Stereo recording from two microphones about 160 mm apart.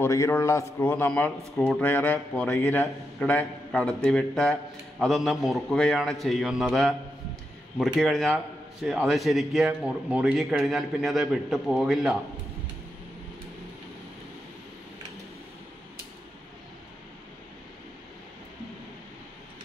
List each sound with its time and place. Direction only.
0.0 s a man's voice: 15° left (ahead or behind); by 12.2 s centre (ahead or behind)